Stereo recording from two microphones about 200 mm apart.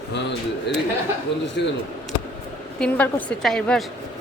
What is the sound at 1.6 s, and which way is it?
Speech, 60° left (ahead or behind).